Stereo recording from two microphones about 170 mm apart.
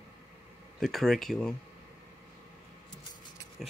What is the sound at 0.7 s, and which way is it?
Speech, centre (ahead or behind).